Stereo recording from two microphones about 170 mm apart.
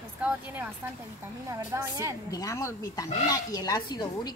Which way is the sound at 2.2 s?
20° left (ahead or behind).